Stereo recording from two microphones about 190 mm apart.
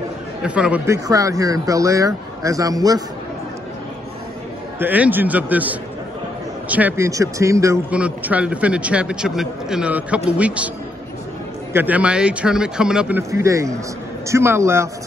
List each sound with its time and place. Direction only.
0.4 s speech: 5° right (ahead or behind)
4.7 s speech: 10° right (ahead or behind)
11.7 s speech: 10° right (ahead or behind)
13.3 s speech: 15° right (ahead or behind)